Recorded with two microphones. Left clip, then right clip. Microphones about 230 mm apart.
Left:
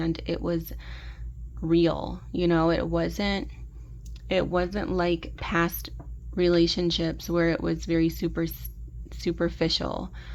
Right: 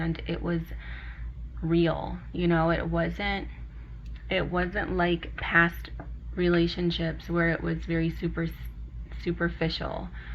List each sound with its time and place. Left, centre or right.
0.0 s speech: left